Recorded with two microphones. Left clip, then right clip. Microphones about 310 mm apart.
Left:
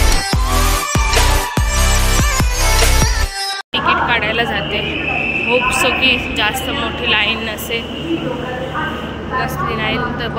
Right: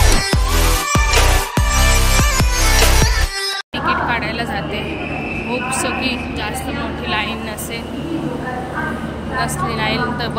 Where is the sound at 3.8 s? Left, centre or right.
Centre.